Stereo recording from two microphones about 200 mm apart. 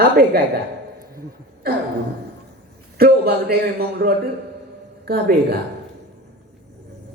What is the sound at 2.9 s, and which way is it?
A woman's voice, 50° right (ahead or behind).